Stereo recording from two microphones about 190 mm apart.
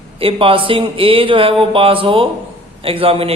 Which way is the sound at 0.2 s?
30° right (ahead or behind).